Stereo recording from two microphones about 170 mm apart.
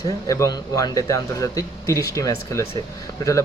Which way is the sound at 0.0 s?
20° left (ahead or behind).